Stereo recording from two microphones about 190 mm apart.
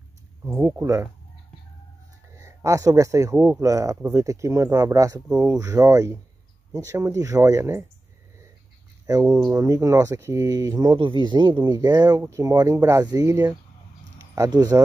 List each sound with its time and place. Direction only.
0.5 s speech: 15° right (ahead or behind)
2.3 s speech: 15° right (ahead or behind)
9.0 s speech: 15° right (ahead or behind)